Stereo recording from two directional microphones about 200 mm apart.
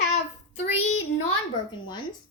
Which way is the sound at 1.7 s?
20° left (ahead or behind).